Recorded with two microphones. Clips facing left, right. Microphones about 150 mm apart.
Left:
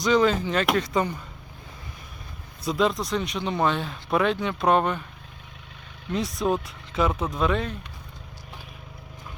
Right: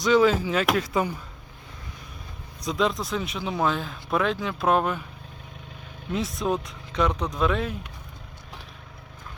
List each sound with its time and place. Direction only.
0.0 s speech: centre (ahead or behind)
2.6 s speech: centre (ahead or behind)
6.1 s speech: centre (ahead or behind)